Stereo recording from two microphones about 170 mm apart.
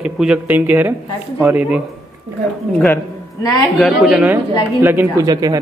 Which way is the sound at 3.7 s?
Centre (ahead or behind).